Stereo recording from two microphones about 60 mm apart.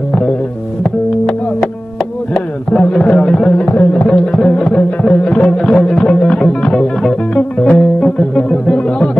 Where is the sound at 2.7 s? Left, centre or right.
Centre.